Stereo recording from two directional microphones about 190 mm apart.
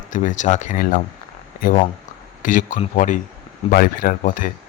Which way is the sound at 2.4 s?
45° left (ahead or behind).